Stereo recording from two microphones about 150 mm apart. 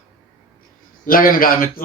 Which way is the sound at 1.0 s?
70° left (ahead or behind).